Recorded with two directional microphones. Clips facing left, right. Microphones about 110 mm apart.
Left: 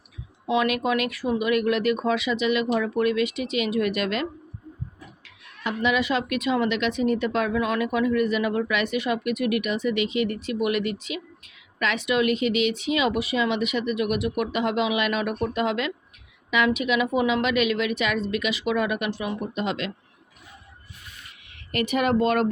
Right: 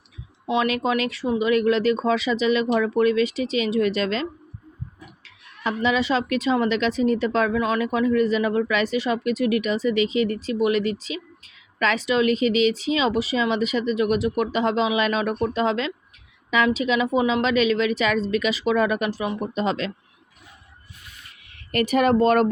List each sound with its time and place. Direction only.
0.5 s speech: 30° right (ahead or behind)
21.5 s speech: 40° right (ahead or behind)